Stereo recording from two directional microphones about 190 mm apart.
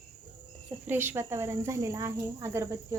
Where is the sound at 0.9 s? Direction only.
10° right (ahead or behind).